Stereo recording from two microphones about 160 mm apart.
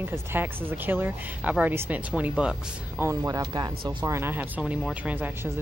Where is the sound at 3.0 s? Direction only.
20° right (ahead or behind).